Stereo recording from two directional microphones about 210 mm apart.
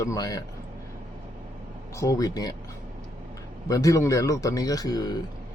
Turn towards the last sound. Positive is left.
turn(degrees=20)  # may be behind; listen again after turning